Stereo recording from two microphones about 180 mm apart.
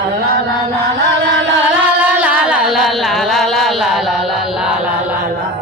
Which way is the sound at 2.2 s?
5° right (ahead or behind).